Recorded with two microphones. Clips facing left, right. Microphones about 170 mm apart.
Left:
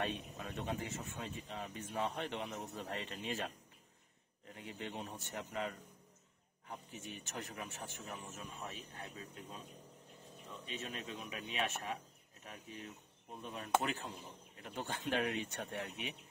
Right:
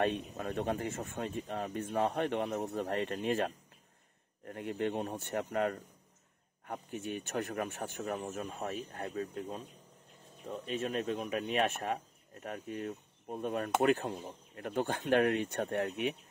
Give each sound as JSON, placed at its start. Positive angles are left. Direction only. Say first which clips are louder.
{"t": 0.0, "sound": "speech", "louder": "right 8 dB", "side_deg": -55}